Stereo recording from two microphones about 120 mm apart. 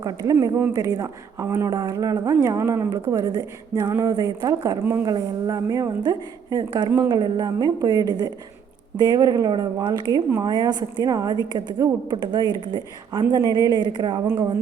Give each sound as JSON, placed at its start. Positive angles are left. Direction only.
{"t": 0.0, "sound": "a woman's voice", "side_deg": -30}